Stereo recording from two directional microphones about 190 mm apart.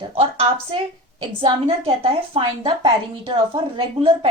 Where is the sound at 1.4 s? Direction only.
30° right (ahead or behind).